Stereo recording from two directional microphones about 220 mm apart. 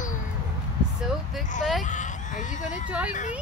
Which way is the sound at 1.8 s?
35° left (ahead or behind).